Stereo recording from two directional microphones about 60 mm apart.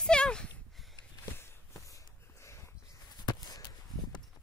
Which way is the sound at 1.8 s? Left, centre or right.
Left.